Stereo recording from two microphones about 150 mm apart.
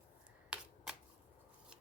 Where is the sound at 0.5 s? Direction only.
10° right (ahead or behind).